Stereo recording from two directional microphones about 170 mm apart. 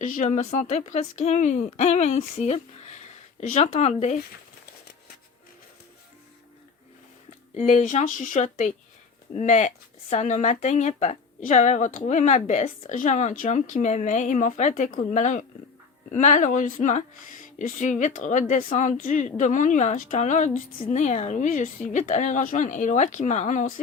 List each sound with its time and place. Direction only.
0.0 s speech: 50° left (ahead or behind)
7.5 s speech: 40° left (ahead or behind)